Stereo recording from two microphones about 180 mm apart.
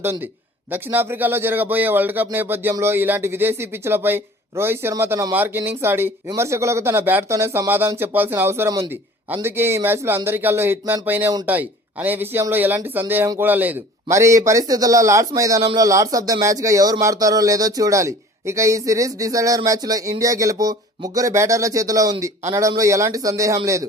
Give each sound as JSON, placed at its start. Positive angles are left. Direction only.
{"t": 0.0, "sound": "speech", "side_deg": -15}